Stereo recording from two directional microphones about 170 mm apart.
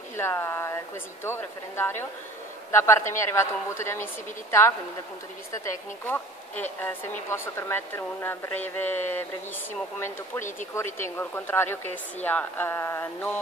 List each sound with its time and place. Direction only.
0.1 s a sound: 15° left (ahead or behind)
1.2 s speech: 15° left (ahead or behind)
6.0 s speech: 10° left (ahead or behind)